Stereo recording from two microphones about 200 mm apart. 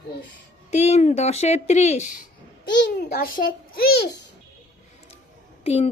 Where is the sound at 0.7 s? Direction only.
35° left (ahead or behind).